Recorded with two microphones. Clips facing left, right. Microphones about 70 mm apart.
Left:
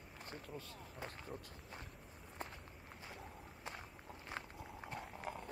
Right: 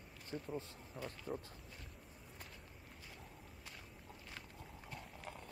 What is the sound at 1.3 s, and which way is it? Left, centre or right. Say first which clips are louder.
Speech: right 5 dB; centre.